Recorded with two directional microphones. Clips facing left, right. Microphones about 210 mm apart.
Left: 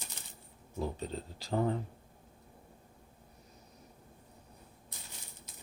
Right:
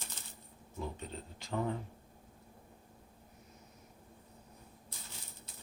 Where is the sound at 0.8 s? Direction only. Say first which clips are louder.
Left 5 dB; 35° left (ahead or behind).